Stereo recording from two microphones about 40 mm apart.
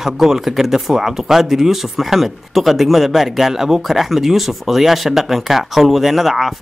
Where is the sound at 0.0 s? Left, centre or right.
Centre.